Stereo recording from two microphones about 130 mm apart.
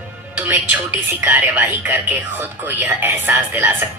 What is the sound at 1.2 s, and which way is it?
Speech, 15° right (ahead or behind).